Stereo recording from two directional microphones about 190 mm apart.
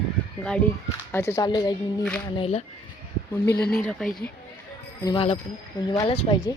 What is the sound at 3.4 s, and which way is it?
Speech, 55° left (ahead or behind).